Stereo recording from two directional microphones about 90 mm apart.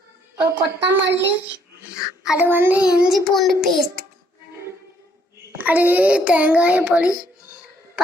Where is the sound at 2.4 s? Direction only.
20° right (ahead or behind).